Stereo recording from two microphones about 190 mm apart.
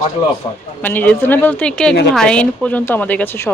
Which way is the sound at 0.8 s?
10° left (ahead or behind).